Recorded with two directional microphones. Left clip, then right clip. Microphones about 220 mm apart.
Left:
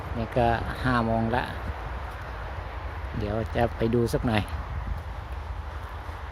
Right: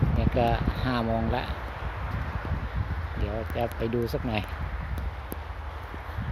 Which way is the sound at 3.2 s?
20° left (ahead or behind).